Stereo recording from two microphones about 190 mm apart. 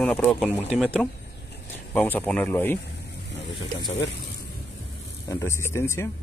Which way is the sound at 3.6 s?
20° left (ahead or behind).